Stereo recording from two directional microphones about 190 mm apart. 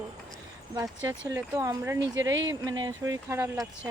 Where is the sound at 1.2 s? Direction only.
15° right (ahead or behind).